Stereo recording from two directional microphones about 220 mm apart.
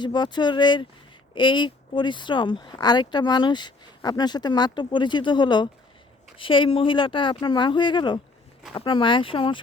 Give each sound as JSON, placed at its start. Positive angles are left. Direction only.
{"t": 0.0, "sound": "speech", "side_deg": 20}